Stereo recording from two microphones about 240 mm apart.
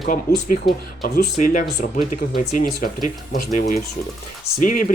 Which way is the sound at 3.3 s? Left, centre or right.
Left.